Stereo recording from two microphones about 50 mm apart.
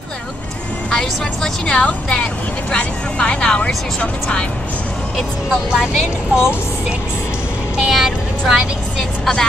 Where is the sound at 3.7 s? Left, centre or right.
Centre.